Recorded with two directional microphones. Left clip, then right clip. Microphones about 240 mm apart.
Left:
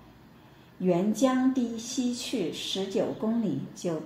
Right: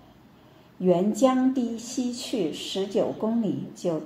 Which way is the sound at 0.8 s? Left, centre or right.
Right.